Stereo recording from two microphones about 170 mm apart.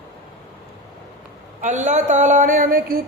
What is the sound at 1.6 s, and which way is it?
Speech, 45° right (ahead or behind).